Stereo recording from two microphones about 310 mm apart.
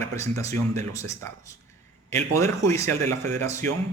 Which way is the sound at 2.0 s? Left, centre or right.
Centre.